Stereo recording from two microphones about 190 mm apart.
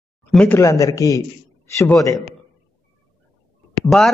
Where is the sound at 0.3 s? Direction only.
10° left (ahead or behind).